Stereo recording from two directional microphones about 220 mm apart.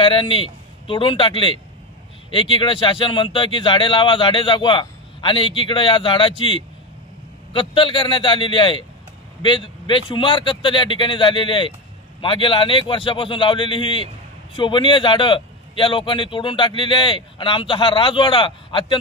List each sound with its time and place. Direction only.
0.0 s a man's voice: 25° left (ahead or behind)